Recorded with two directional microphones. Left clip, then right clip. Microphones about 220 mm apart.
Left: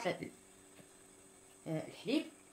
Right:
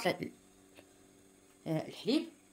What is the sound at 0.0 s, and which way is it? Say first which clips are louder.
Speech: right 4 dB; 40° right (ahead or behind).